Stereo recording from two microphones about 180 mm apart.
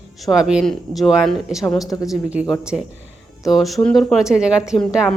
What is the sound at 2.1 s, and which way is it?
A woman's voice, 5° right (ahead or behind).